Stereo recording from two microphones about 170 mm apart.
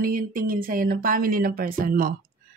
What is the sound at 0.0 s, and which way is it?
Speech, 55° right (ahead or behind).